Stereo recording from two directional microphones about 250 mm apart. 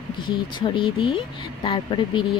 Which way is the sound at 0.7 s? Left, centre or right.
Left.